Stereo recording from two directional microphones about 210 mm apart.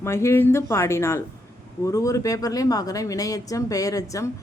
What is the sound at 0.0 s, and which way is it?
Speech, 15° left (ahead or behind).